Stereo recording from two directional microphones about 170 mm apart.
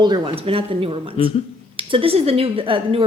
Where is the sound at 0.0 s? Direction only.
25° right (ahead or behind).